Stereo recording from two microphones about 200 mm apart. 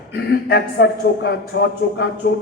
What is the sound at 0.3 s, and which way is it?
A man's voice, 50° left (ahead or behind).